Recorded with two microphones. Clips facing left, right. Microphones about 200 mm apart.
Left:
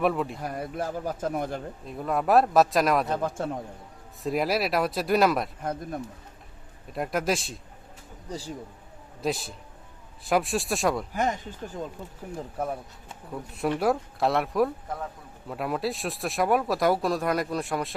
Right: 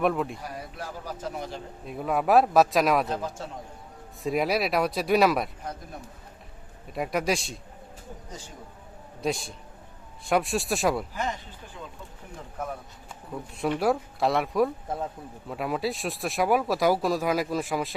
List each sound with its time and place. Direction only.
0.0 s speech: centre (ahead or behind)
0.4 s speech: 55° left (ahead or behind)
1.9 s speech: 5° right (ahead or behind)
3.1 s a man's voice: 55° left (ahead or behind)
4.2 s speech: centre (ahead or behind)
6.9 s speech: centre (ahead or behind)
8.3 s speech: 35° left (ahead or behind)
9.2 s speech: centre (ahead or behind)
11.1 s speech: 50° left (ahead or behind)
13.6 s speech: centre (ahead or behind)